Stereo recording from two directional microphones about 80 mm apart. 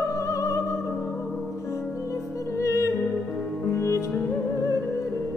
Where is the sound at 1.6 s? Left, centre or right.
Left.